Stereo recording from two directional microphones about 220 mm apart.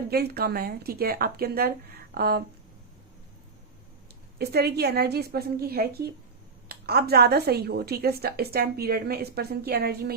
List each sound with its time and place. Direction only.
0.1 s a woman's voice: 45° right (ahead or behind)
4.4 s a woman's voice: 45° right (ahead or behind)